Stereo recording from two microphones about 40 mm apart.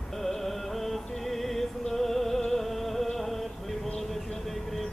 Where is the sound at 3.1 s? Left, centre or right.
Centre.